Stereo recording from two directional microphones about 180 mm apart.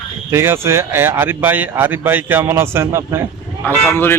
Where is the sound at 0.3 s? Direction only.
15° right (ahead or behind).